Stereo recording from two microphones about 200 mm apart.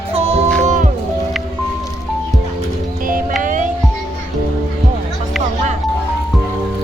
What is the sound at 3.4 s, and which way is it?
Music, 40° right (ahead or behind).